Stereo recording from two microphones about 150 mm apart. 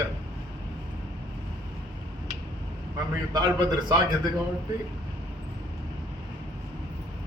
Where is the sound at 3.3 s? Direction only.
30° right (ahead or behind).